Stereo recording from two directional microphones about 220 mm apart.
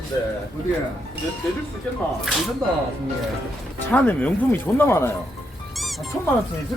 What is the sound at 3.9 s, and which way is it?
Speech, 5° left (ahead or behind).